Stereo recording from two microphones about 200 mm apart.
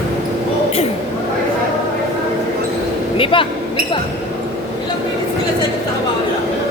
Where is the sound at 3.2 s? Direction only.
25° left (ahead or behind).